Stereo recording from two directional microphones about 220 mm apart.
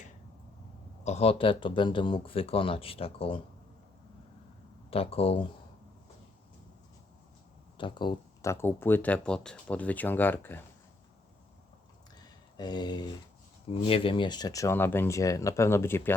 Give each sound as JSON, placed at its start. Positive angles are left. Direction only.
{"t": 1.0, "sound": "speech", "side_deg": 30}
{"t": 4.9, "sound": "speech", "side_deg": 25}
{"t": 7.8, "sound": "speech", "side_deg": 20}
{"t": 12.5, "sound": "speech", "side_deg": 20}